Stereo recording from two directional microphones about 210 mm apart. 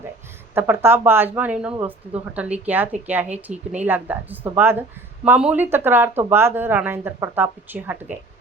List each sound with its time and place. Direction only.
0.5 s speech: 10° right (ahead or behind)